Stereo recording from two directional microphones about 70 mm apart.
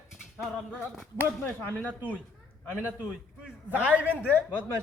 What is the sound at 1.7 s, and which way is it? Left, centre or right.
Speech, left.